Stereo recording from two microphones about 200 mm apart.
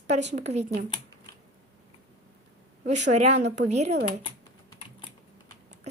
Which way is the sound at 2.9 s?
35° right (ahead or behind).